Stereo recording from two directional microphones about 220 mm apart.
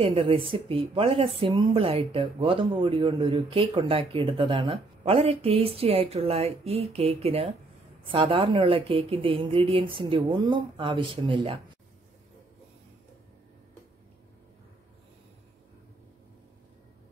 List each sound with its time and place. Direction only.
0.0 s speech: 25° right (ahead or behind)